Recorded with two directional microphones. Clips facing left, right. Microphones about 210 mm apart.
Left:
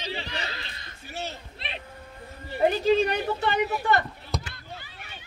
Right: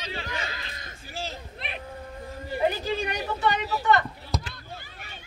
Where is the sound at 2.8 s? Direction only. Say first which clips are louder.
Left 7 dB; 60° left (ahead or behind).